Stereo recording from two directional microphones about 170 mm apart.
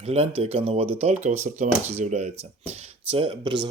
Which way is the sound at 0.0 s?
40° right (ahead or behind).